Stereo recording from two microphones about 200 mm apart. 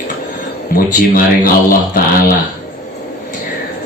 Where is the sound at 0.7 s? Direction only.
45° left (ahead or behind).